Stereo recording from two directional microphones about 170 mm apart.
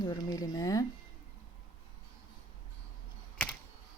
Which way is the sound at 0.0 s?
25° left (ahead or behind).